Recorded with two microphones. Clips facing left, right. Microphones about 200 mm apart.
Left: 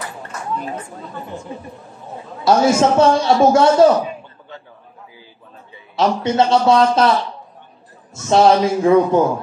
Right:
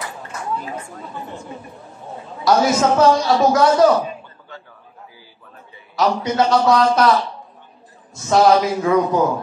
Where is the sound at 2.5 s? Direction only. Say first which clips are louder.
Left 2 dB; 30° left (ahead or behind).